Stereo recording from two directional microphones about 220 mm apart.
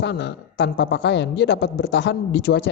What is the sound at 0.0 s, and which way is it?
Speech, 50° left (ahead or behind).